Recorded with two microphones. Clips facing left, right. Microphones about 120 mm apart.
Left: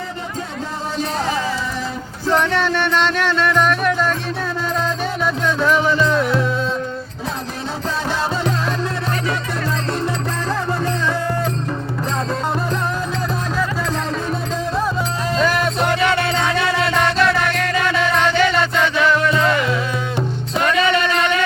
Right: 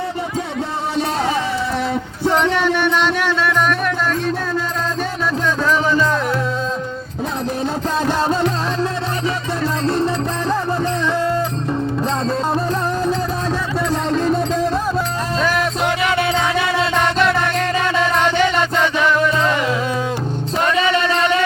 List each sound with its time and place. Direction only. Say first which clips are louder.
2.3 s music: even; 15° right (ahead or behind)
15.4 s music: left 1 dB; centre (ahead or behind)
20.7 s music: even; 30° right (ahead or behind)